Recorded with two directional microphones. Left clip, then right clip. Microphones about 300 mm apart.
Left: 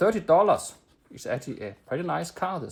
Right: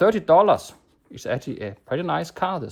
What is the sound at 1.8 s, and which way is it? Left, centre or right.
Speech, centre.